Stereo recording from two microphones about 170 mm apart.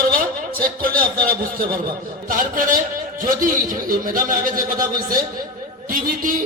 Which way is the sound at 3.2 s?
55° right (ahead or behind).